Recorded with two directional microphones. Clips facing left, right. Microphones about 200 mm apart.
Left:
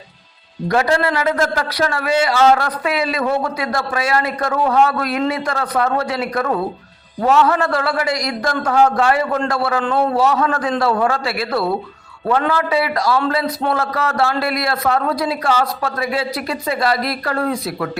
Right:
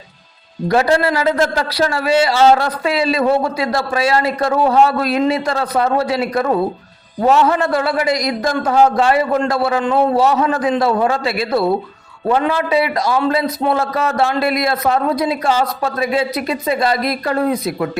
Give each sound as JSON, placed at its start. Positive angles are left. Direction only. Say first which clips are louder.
{"t": 0.7, "sound": "a man's voice", "louder": "right 2 dB", "side_deg": -30}
{"t": 9.8, "sound": "a man's voice", "louder": "right 3 dB", "side_deg": -10}
{"t": 10.2, "sound": "a man's voice", "louder": "right 2 dB", "side_deg": -20}